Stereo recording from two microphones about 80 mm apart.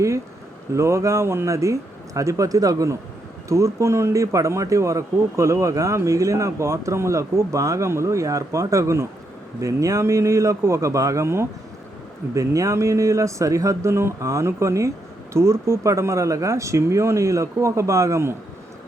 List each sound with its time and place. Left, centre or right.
0.7 s speech: right